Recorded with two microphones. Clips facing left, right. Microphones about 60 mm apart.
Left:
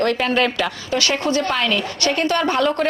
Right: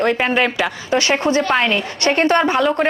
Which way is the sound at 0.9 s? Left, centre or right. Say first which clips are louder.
Right 4 dB; right.